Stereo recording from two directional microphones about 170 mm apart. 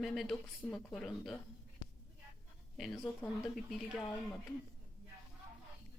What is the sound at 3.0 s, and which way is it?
Speech, 15° left (ahead or behind).